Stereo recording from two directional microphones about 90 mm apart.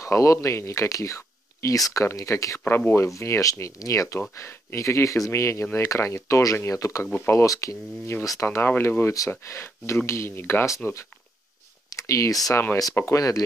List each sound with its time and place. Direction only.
0.0 s speech: 35° left (ahead or behind)
2.6 s speech: 20° left (ahead or behind)
7.1 s speech: 20° left (ahead or behind)
7.3 s speech: 40° left (ahead or behind)
8.5 s speech: 25° left (ahead or behind)
11.9 s speech: 40° left (ahead or behind)